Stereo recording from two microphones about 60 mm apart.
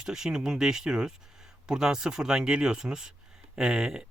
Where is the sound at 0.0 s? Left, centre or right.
Centre.